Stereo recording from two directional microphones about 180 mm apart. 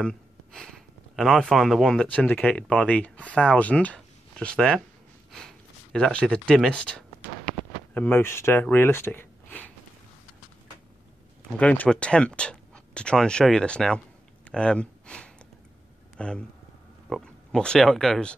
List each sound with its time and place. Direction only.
0.0 s speech: 5° left (ahead or behind)
11.5 s speech: 10° left (ahead or behind)